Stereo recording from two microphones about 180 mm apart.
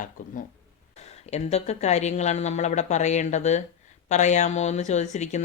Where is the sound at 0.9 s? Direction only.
35° left (ahead or behind).